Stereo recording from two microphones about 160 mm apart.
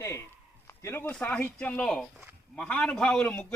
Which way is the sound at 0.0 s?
15° left (ahead or behind).